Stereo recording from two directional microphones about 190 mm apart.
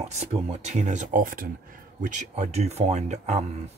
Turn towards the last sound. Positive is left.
turn(degrees=-40)  # may be behind; listen again after turning